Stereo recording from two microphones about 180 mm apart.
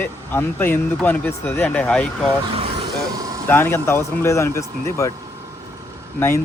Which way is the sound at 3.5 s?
15° left (ahead or behind).